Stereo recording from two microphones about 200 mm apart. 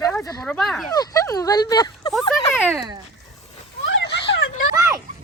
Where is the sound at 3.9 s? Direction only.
65° left (ahead or behind).